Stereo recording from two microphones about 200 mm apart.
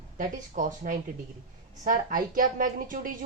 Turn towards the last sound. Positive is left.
turn(degrees=-45)  # may be behind; listen again after turning